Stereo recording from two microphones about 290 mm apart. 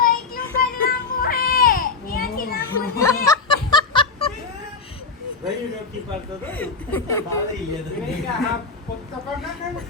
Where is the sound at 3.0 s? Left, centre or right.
Centre.